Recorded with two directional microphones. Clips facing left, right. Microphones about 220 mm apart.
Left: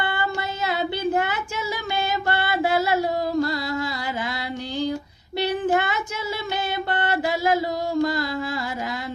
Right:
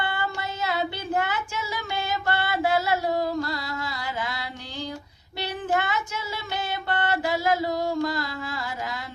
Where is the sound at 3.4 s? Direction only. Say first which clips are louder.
Left 6 dB; 15° left (ahead or behind).